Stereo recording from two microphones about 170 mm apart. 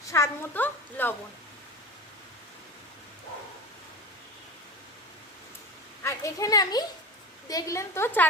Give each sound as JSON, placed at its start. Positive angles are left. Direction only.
{"t": 0.1, "sound": "a child's voice", "side_deg": 15}
{"t": 6.0, "sound": "a woman's voice", "side_deg": 20}